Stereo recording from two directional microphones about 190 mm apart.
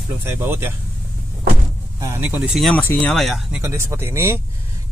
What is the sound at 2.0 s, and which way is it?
Speech, 15° right (ahead or behind).